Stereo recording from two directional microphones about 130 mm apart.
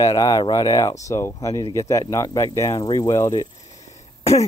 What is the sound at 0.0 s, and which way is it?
Speech, 30° left (ahead or behind).